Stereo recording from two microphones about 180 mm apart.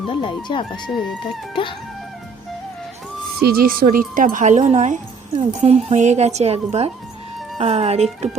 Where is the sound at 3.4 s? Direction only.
60° right (ahead or behind).